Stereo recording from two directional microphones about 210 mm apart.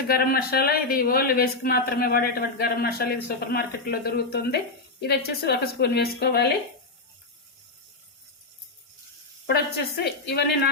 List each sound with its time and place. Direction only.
0.1 s speech: 45° left (ahead or behind)
9.5 s speech: 50° left (ahead or behind)